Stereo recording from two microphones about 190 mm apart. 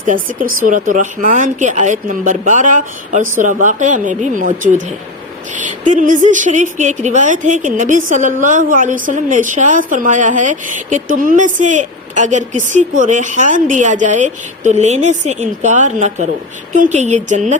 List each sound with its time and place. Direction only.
0.1 s a woman's voice: 45° right (ahead or behind)